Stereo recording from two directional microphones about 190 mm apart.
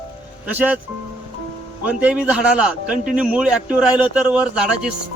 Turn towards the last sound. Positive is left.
turn(degrees=-5)  # may be behind; listen again after turning